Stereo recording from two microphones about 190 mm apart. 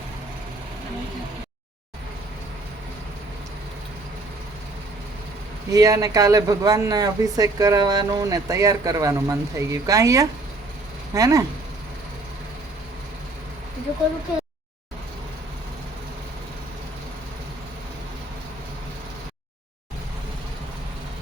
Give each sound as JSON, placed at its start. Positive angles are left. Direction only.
{"t": 5.7, "sound": "speech", "side_deg": -20}